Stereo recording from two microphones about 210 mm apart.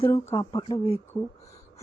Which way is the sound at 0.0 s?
15° left (ahead or behind).